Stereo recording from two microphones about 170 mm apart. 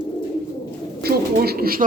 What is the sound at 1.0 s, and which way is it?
Bird, 65° right (ahead or behind).